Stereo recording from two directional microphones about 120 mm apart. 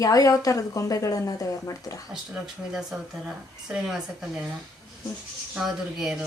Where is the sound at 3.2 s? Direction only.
5° right (ahead or behind).